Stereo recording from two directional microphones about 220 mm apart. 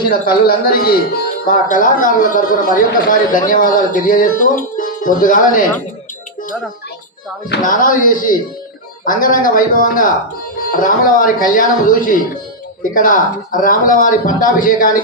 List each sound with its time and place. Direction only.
0.1 s speech: 45° left (ahead or behind)
7.5 s speech: 40° left (ahead or behind)